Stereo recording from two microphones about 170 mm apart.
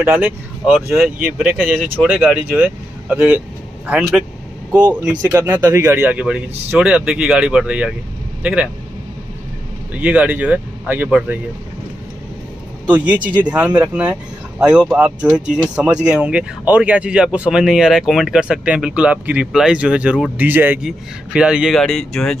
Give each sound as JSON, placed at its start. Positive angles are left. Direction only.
{"t": 0.0, "sound": "a man's voice", "side_deg": -10}
{"t": 9.9, "sound": "speech", "side_deg": -5}
{"t": 12.8, "sound": "speech", "side_deg": -10}